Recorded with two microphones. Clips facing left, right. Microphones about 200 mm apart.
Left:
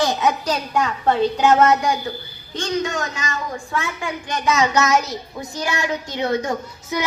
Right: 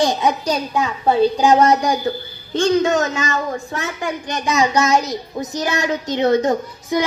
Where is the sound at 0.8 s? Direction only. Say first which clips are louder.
Right 1 dB; 10° right (ahead or behind).